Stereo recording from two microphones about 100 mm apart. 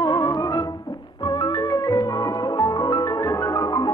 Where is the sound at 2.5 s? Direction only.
40° left (ahead or behind).